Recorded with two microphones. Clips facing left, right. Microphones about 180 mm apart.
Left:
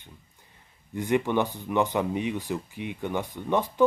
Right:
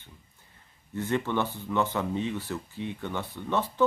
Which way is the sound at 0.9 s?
15° left (ahead or behind).